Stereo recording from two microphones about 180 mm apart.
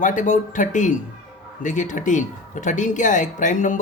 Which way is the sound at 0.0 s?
45° left (ahead or behind).